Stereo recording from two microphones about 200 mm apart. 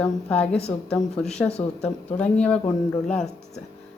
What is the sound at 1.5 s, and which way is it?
Speech, 30° left (ahead or behind).